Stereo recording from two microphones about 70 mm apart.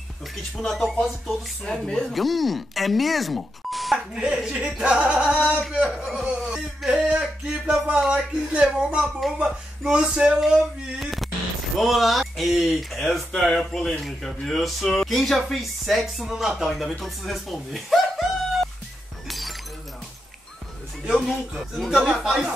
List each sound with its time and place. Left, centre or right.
0.6 s speech: centre
5.6 s speech: centre
6.9 s a sound: centre
8.0 s speech: centre
8.4 s speech: centre
17.0 s chuckle: centre
19.2 s glass: centre
21.0 s speech: centre